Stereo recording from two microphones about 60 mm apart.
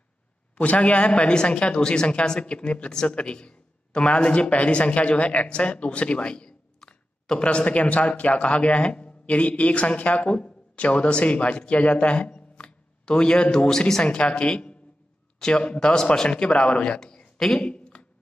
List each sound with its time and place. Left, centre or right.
0.6 s a woman's voice: centre